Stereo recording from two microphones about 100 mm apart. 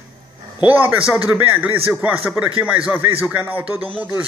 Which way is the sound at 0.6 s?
15° right (ahead or behind).